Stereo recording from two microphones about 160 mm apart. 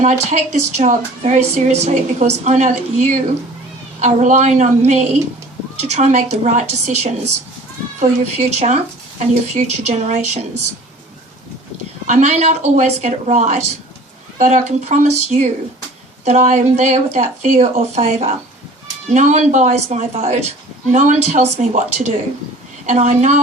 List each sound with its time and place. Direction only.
0.0 s a woman's voice: 45° right (ahead or behind)
12.0 s a woman's voice: 45° right (ahead or behind)